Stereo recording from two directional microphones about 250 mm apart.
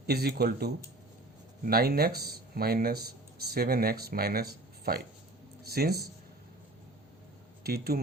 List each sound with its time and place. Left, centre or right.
0.0 s speech: right
7.6 s speech: right